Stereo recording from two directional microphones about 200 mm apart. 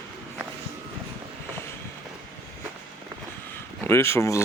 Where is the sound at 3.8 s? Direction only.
10° left (ahead or behind).